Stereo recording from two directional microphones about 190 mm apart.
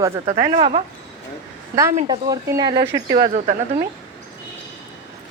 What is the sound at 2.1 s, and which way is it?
Speech, 20° right (ahead or behind).